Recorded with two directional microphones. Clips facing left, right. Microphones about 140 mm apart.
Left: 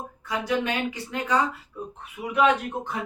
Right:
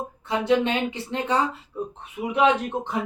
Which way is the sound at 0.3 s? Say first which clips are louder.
Right 5 dB; 25° right (ahead or behind).